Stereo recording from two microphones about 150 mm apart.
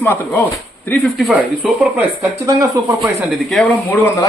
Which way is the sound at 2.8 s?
20° right (ahead or behind).